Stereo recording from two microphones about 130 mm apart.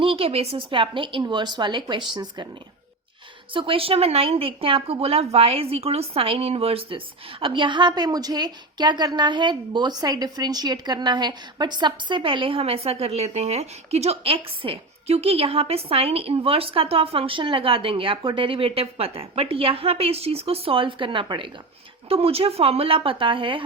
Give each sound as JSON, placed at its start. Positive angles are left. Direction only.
{"t": 0.0, "sound": "speech", "side_deg": -45}
{"t": 3.5, "sound": "speech", "side_deg": -40}